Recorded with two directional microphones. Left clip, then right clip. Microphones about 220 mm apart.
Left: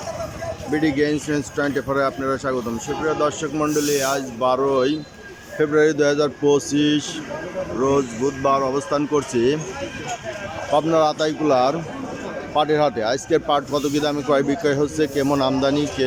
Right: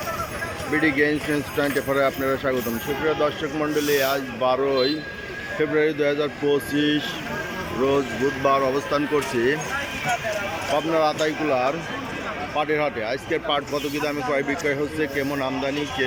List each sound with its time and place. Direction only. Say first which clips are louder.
0.7 s speech: even; 10° left (ahead or behind)
8.4 s speech: left 1 dB; 5° left (ahead or behind)
10.8 s speech: left 4 dB; 15° left (ahead or behind)